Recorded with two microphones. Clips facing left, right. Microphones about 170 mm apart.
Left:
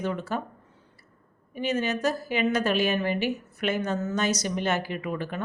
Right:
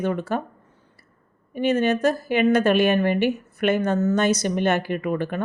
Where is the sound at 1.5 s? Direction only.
55° right (ahead or behind).